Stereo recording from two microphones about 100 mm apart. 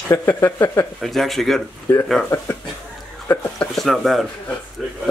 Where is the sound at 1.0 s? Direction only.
Centre (ahead or behind).